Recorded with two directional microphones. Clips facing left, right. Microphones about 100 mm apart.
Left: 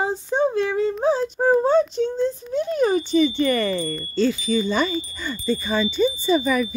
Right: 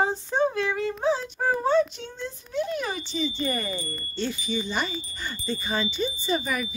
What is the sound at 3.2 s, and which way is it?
Wind chime, 75° left (ahead or behind).